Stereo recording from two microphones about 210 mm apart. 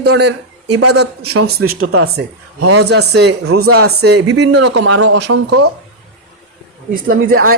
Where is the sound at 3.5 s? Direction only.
90° right.